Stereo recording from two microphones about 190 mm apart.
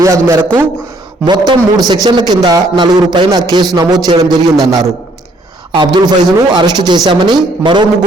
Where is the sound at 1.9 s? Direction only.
20° right (ahead or behind).